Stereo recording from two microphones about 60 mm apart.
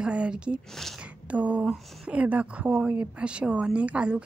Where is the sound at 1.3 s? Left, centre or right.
Right.